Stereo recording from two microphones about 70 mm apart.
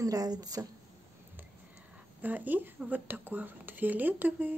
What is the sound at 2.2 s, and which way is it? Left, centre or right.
Speech, right.